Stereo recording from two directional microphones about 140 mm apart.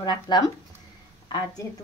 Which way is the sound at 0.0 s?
30° left (ahead or behind).